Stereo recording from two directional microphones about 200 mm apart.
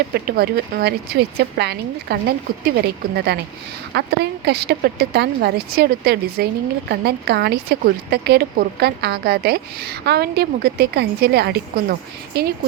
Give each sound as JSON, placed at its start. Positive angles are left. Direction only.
{"t": 0.1, "sound": "a woman's voice", "side_deg": -50}